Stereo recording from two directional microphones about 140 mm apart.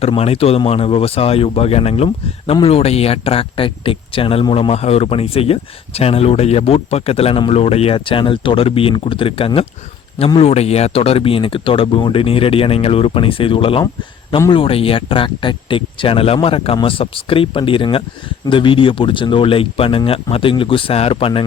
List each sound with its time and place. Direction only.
0.0 s speech: 45° left (ahead or behind)